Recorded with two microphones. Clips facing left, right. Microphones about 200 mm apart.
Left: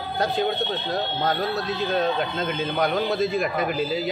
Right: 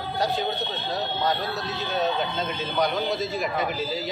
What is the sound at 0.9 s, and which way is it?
Speech, 55° left (ahead or behind).